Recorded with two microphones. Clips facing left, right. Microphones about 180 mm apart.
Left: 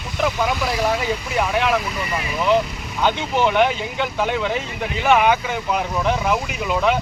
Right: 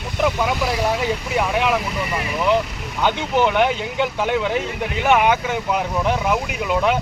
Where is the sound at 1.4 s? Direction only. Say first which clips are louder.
Even; 10° right (ahead or behind).